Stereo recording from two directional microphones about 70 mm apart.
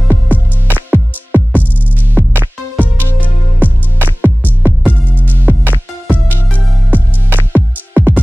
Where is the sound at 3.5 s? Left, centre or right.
Right.